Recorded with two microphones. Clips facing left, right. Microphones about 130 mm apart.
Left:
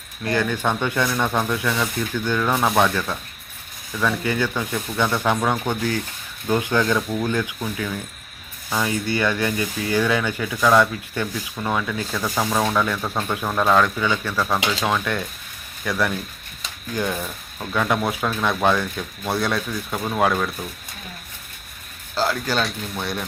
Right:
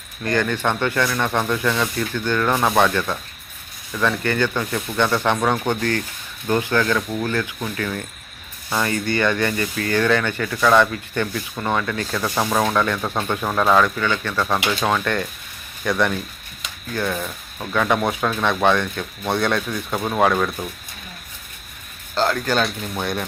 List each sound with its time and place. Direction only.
0.2 s speech: 5° left (ahead or behind)
7.6 s speech: 5° left (ahead or behind)
14.0 s speech: 10° left (ahead or behind)
16.9 s speech: 15° left (ahead or behind)
17.2 s speech: centre (ahead or behind)
20.0 s speech: 10° right (ahead or behind)
22.1 s speech: 5° left (ahead or behind)